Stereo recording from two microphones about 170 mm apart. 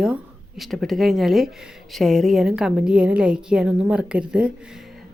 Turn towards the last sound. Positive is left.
turn(degrees=-5)  # may be behind; listen again after turning